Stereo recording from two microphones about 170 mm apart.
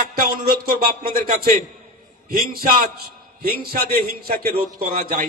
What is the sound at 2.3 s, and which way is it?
A man's voice, 60° right (ahead or behind).